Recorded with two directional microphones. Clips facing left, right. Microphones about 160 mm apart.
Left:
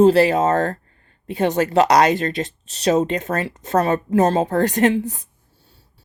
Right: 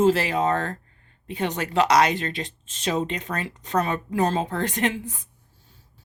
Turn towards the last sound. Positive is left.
turn(degrees=40)  # may be behind; listen again after turning